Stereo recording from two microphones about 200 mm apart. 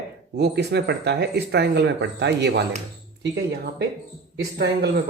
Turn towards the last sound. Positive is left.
turn(degrees=-55)  # may be behind; listen again after turning